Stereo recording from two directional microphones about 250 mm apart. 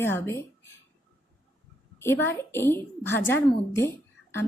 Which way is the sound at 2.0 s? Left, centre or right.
Centre.